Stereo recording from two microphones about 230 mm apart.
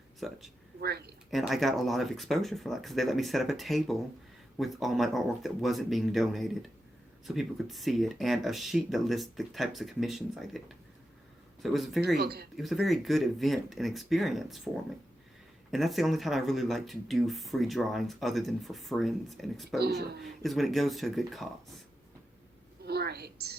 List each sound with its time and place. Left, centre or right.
0.2 s speech: centre
0.8 s speech: right
1.3 s speech: centre
12.0 s speech: right
12.5 s speech: centre
22.8 s a sound: right